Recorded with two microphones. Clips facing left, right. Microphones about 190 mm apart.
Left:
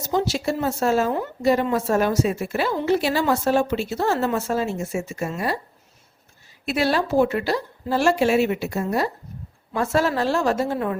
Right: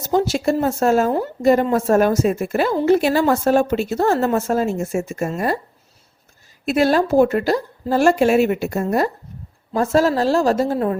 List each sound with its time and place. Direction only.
0.1 s speech: 50° right (ahead or behind)
6.7 s a woman's voice: 45° right (ahead or behind)